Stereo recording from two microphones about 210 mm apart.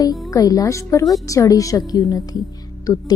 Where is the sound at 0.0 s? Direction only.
15° left (ahead or behind).